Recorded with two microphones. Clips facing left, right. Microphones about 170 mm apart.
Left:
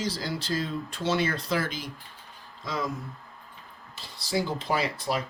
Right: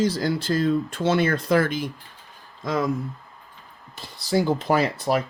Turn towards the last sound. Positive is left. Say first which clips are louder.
# right 6 dB
turn(degrees=-50)  # may be behind; listen again after turning